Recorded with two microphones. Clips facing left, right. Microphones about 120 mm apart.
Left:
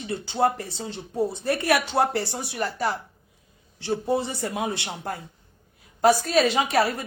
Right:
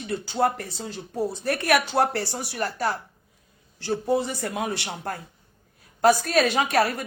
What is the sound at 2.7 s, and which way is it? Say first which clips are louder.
Speech: even; 15° left (ahead or behind).